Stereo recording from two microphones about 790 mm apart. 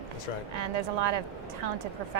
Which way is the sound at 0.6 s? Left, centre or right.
Right.